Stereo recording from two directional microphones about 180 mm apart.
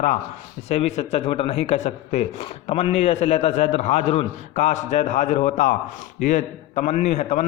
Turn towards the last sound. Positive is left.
turn(degrees=40)  # may be behind; listen again after turning